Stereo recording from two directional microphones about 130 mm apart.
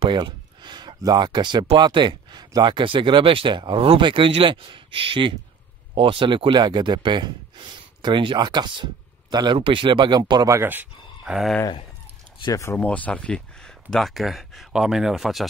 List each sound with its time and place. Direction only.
0.0 s speech: 35° right (ahead or behind)
10.6 s a sound: 15° right (ahead or behind)
12.4 s speech: 25° left (ahead or behind)
12.7 s speech: 10° left (ahead or behind)